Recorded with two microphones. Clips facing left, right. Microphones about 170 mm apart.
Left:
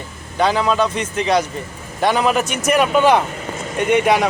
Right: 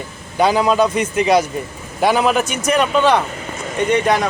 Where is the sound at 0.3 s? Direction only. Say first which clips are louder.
Right 2 dB; 10° right (ahead or behind).